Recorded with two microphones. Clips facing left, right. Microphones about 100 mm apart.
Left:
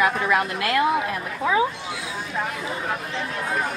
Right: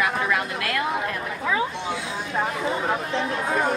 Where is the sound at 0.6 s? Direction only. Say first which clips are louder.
Left 4 dB; 10° left (ahead or behind).